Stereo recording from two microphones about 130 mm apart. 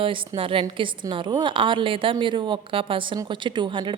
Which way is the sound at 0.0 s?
40° right (ahead or behind).